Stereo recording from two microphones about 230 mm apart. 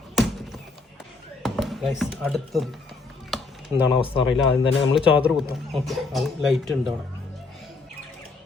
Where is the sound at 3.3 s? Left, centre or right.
Centre.